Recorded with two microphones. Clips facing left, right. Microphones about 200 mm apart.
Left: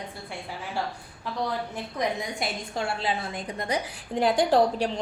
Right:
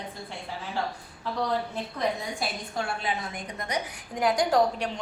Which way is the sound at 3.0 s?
30° left (ahead or behind).